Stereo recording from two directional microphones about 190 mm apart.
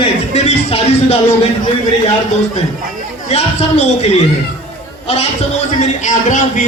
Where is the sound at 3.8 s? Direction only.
35° left (ahead or behind).